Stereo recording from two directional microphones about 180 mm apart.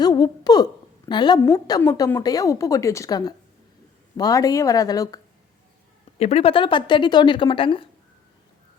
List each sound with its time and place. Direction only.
0.0 s a woman's voice: 20° left (ahead or behind)
6.1 s a woman's voice: 35° left (ahead or behind)